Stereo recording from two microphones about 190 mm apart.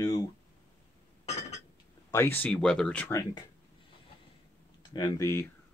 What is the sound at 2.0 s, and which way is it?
Speech, 15° left (ahead or behind).